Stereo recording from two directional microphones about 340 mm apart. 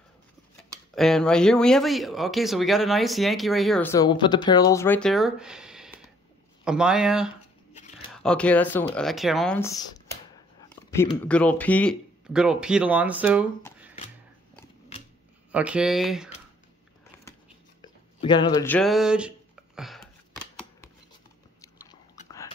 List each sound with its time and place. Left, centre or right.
0.9 s speech: centre
7.7 s a sound: left
8.1 s speech: centre
15.5 s speech: centre
17.8 s speech: centre